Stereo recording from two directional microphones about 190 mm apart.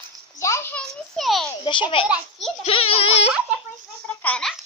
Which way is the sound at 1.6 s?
25° left (ahead or behind).